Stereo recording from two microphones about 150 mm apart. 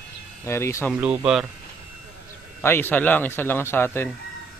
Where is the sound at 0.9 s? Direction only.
10° right (ahead or behind).